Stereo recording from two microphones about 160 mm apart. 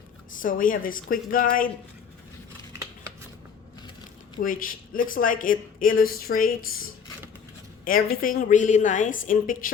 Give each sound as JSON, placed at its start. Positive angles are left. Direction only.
{"t": 0.3, "sound": "speech", "side_deg": 60}
{"t": 4.4, "sound": "speech", "side_deg": 60}